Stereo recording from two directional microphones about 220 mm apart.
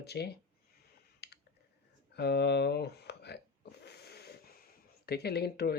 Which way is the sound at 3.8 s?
45° left (ahead or behind).